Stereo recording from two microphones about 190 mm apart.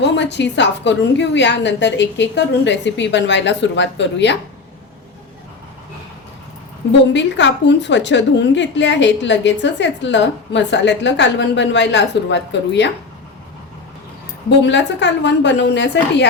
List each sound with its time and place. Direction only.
0.0 s a woman's voice: 65° left (ahead or behind)
7.0 s a woman's voice: 70° left (ahead or behind)
14.6 s a woman's voice: 65° left (ahead or behind)